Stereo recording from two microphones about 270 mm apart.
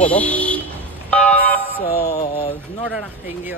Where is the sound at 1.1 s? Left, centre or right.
Centre.